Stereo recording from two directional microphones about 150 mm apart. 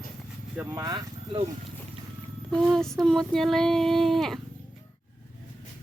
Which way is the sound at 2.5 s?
5° left (ahead or behind).